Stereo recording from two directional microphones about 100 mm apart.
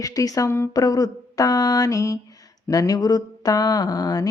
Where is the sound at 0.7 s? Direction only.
40° left (ahead or behind).